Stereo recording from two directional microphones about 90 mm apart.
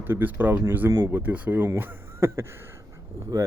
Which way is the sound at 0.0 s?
20° right (ahead or behind).